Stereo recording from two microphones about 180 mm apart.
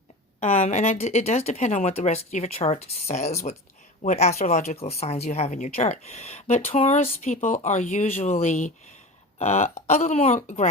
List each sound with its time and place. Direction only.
0.3 s speech: 40° left (ahead or behind)